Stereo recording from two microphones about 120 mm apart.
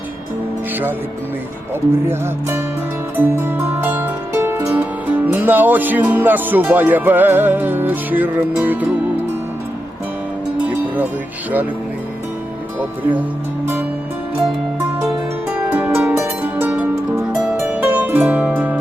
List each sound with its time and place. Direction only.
3.2 s music: 15° right (ahead or behind)
15.4 s music: 10° right (ahead or behind)
17.3 s harp: 5° right (ahead or behind)